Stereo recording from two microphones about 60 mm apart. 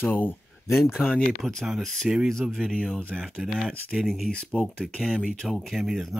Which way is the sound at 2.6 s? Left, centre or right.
Centre.